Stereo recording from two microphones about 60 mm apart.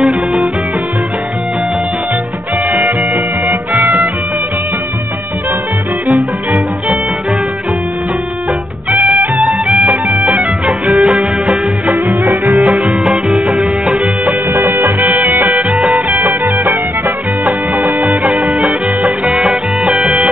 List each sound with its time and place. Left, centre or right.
0.0 s music: centre
9.4 s music: centre
10.9 s music: centre
12.5 s music: centre
14.5 s music: right
18.2 s music: centre